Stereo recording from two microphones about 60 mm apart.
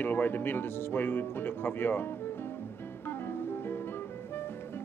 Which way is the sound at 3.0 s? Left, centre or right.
Left.